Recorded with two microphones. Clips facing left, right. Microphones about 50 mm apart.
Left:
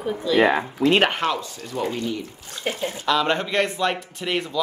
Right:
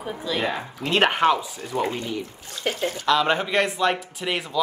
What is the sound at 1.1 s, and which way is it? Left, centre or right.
A woman's voice, centre.